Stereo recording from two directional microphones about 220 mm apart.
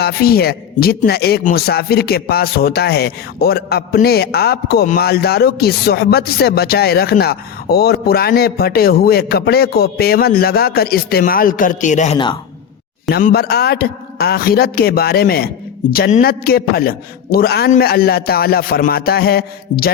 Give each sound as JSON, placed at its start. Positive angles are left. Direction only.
{"t": 0.0, "sound": "a man's voice", "side_deg": 45}
{"t": 12.1, "sound": "a man's voice", "side_deg": 20}
{"t": 13.1, "sound": "a man's voice", "side_deg": 45}